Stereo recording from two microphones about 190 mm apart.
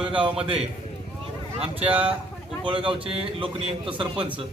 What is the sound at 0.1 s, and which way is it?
Speech, 25° right (ahead or behind).